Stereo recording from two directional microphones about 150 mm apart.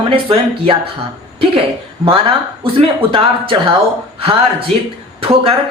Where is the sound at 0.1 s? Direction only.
35° right (ahead or behind).